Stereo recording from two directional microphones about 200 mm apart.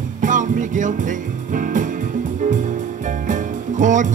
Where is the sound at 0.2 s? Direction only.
40° right (ahead or behind).